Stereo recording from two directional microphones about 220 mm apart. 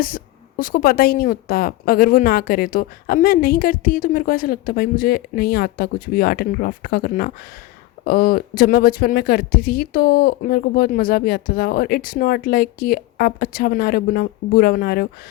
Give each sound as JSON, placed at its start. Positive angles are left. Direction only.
{"t": 0.0, "sound": "a woman's voice", "side_deg": 40}